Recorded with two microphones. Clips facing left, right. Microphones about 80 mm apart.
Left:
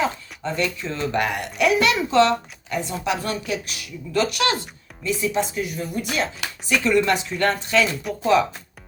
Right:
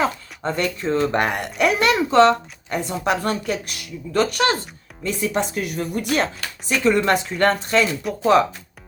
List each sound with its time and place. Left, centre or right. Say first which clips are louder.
0.4 s speech: right 3 dB; right
5.0 s speech: even; right
6.7 s speech: right 1 dB; right
8.1 s speech: right 2 dB; centre